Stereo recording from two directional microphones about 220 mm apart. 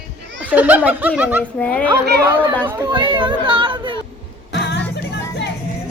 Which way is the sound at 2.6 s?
15° right (ahead or behind).